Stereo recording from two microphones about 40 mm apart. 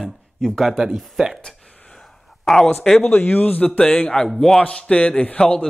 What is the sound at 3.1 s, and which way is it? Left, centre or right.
Speech, left.